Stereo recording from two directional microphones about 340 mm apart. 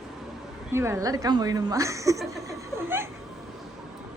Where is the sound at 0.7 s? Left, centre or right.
Centre.